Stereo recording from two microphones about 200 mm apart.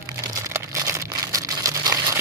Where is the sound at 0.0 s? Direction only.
15° right (ahead or behind).